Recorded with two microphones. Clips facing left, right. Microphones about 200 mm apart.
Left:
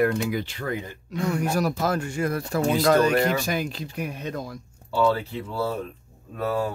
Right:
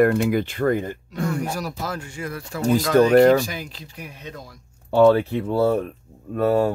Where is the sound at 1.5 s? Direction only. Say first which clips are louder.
Left 5 dB; 55° left (ahead or behind).